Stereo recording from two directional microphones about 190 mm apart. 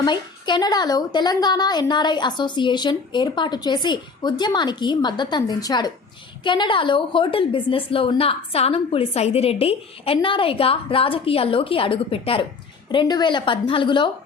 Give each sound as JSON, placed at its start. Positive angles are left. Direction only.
{"t": 0.0, "sound": "a woman's voice", "side_deg": 25}